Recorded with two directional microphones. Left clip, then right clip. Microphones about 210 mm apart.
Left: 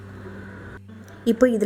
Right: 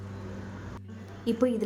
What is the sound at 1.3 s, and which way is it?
Speech, 20° left (ahead or behind).